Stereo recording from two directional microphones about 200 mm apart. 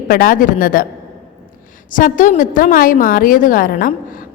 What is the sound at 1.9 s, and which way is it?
A woman's voice, 40° left (ahead or behind).